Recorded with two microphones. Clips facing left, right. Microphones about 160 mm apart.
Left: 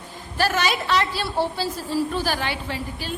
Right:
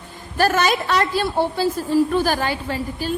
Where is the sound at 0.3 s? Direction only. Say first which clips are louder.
Right 4 dB; 50° right (ahead or behind).